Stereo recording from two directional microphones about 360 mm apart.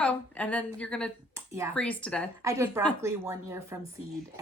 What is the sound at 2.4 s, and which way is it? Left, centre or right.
A woman's voice, centre.